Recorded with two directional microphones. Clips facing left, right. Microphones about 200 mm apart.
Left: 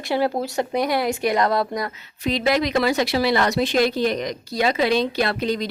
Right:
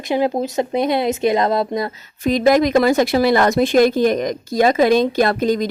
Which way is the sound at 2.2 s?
45° right (ahead or behind).